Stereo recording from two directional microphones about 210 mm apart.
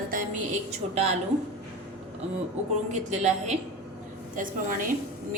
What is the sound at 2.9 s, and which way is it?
A woman's voice, 35° right (ahead or behind).